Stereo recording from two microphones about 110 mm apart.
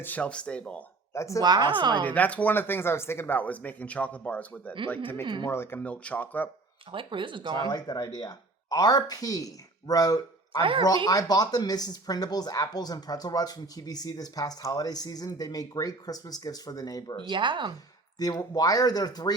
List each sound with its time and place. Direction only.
0.0 s speech: 15° left (ahead or behind)
1.1 s speech: 25° left (ahead or behind)
1.4 s speech: 40° right (ahead or behind)
2.0 s speech: 15° left (ahead or behind)
5.2 s speech: 45° right (ahead or behind)
5.5 s speech: 20° left (ahead or behind)
5.8 s speech: 10° left (ahead or behind)
6.9 s speech: 50° right (ahead or behind)
7.6 s speech: 40° left (ahead or behind)
10.6 s speech: 55° right (ahead or behind)
10.8 s speech: 35° left (ahead or behind)
17.2 s speech: 45° right (ahead or behind)
18.2 s speech: 35° left (ahead or behind)